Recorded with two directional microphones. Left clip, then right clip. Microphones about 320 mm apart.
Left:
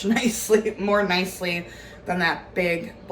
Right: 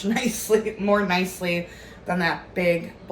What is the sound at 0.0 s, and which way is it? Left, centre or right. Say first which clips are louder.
A woman's voice: left 2 dB; centre.